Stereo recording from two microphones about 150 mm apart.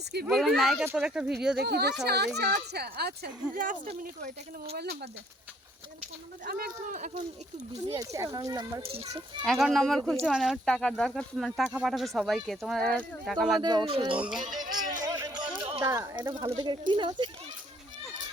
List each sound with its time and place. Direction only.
0.3 s speech: centre (ahead or behind)
1.5 s speech: 90° right
3.5 s speech: 65° right (ahead or behind)
6.4 s speech: 85° right
6.9 s speech: 50° right (ahead or behind)
7.9 s speech: 20° right (ahead or behind)
8.8 s speech: 40° right (ahead or behind)
9.4 s speech: 5° right (ahead or behind)
13.6 s speech: 30° right (ahead or behind)
14.2 s speech: 5° right (ahead or behind)
14.4 s music: 30° right (ahead or behind)
15.8 s speech: 20° right (ahead or behind)
16.4 s speech: 30° right (ahead or behind)